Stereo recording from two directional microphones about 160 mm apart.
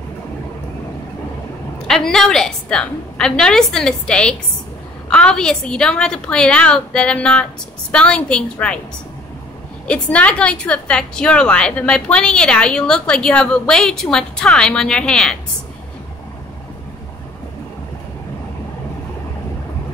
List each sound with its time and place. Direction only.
1.9 s a woman's voice: 5° left (ahead or behind)
9.8 s a woman's voice: 10° left (ahead or behind)